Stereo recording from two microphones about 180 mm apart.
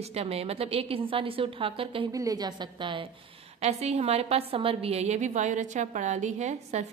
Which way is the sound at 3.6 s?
40° right (ahead or behind).